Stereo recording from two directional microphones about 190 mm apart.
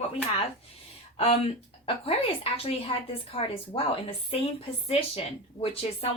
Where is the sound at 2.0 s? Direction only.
30° left (ahead or behind).